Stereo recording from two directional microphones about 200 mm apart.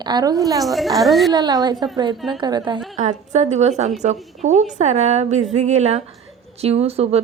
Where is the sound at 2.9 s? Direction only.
35° right (ahead or behind).